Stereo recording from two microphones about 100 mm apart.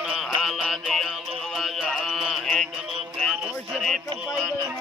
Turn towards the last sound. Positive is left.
turn(degrees=0)  # may be behind; listen again after turning